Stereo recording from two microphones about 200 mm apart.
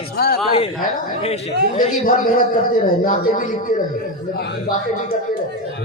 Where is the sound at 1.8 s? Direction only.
45° left (ahead or behind).